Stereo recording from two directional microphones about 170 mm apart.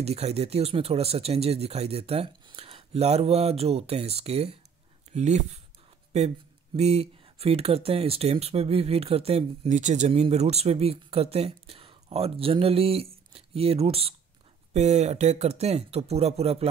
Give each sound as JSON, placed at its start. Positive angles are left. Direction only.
{"t": 0.0, "sound": "speech", "side_deg": -40}
{"t": 6.8, "sound": "speech", "side_deg": -35}